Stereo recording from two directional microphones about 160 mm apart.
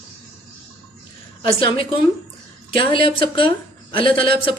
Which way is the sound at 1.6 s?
35° left (ahead or behind).